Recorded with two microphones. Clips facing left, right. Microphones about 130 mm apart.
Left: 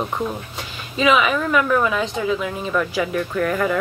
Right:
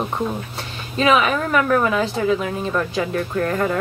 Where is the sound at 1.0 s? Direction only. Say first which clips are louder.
Even; 40° right (ahead or behind).